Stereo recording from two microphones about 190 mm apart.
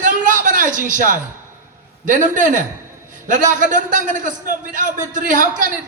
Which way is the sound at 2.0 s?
45° right (ahead or behind).